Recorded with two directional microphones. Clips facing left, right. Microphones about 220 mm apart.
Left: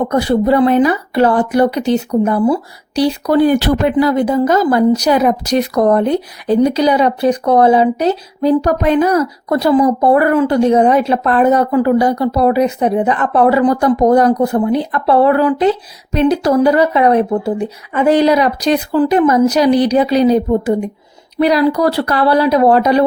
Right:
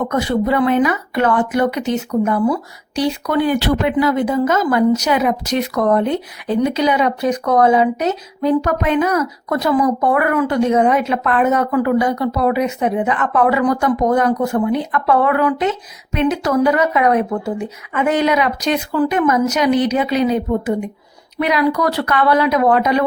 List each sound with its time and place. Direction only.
0.0 s speech: 35° left (ahead or behind)